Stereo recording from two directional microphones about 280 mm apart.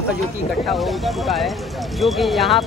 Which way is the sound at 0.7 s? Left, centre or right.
Centre.